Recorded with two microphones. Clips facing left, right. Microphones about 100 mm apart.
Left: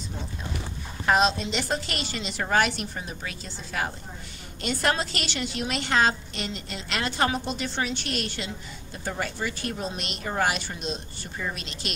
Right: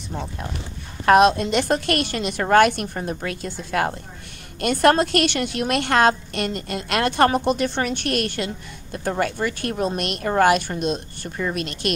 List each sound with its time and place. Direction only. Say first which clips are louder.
1.0 s a woman's voice: right 8 dB; 60° right (ahead or behind)